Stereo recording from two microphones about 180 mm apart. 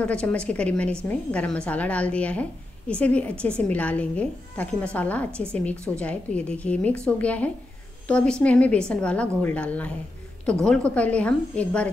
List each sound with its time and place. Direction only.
0.0 s speech: 5° left (ahead or behind)